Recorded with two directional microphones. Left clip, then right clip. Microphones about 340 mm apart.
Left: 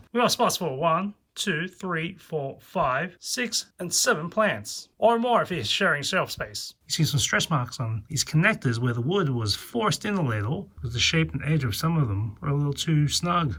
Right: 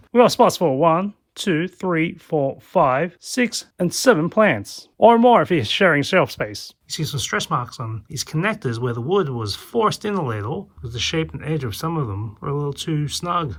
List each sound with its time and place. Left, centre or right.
0.1 s speech: centre
6.8 s speech: centre